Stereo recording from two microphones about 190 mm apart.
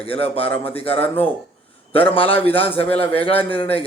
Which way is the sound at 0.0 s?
30° left (ahead or behind).